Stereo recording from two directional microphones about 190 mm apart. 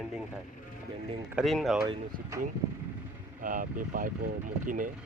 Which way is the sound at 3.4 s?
45° right (ahead or behind).